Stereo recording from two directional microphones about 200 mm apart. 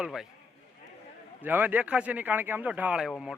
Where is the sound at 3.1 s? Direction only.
5° left (ahead or behind).